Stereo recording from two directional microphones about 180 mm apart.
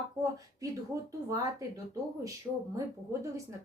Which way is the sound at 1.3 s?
15° right (ahead or behind).